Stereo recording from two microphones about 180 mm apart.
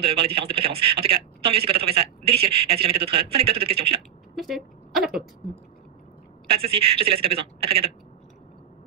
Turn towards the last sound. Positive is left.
turn(degrees=-30)  # may be behind; listen again after turning